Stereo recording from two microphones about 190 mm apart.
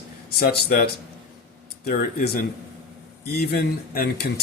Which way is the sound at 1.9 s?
50° left (ahead or behind).